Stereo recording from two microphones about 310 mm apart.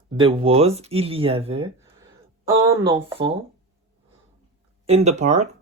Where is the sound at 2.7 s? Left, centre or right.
Centre.